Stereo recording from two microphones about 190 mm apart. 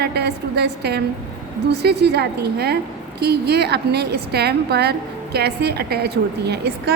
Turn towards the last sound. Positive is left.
turn(degrees=-60)  # may be behind; listen again after turning